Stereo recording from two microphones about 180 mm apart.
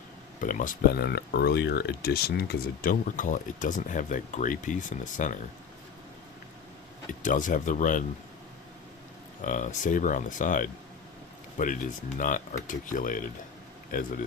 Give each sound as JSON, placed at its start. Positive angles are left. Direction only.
{"t": 0.4, "sound": "speech", "side_deg": 50}
{"t": 7.1, "sound": "speech", "side_deg": 45}
{"t": 9.4, "sound": "speech", "side_deg": 45}